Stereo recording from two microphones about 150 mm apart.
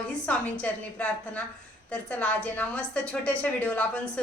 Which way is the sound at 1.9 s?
10° left (ahead or behind).